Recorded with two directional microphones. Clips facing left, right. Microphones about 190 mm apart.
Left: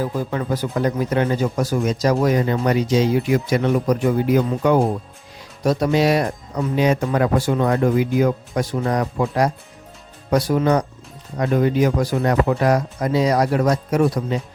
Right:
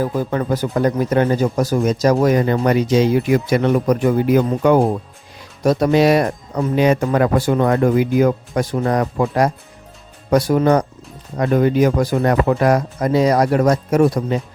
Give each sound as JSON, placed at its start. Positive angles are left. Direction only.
{"t": 0.3, "sound": "speech", "side_deg": -45}